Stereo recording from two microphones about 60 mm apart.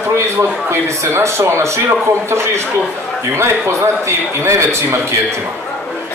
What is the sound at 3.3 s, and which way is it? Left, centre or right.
A man's voice, right.